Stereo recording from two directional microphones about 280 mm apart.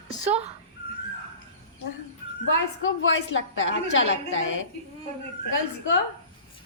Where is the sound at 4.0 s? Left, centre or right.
Left.